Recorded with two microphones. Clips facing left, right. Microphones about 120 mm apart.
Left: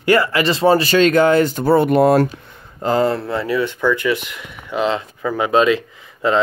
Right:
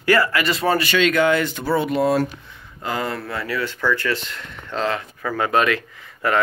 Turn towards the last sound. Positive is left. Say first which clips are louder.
# left 4 dB
turn(degrees=20)  # may be behind; listen again after turning